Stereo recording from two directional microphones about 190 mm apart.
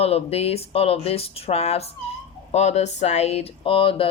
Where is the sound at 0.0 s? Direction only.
30° left (ahead or behind).